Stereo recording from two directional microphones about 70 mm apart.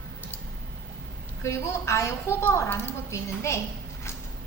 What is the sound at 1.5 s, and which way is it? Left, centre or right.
A woman's voice, left.